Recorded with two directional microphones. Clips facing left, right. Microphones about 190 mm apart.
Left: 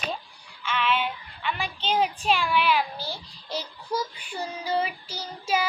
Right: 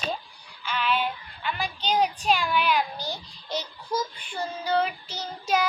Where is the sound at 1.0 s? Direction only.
Centre (ahead or behind).